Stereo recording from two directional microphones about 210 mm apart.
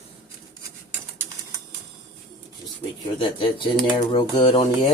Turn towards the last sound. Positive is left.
turn(degrees=25)  # may be behind; listen again after turning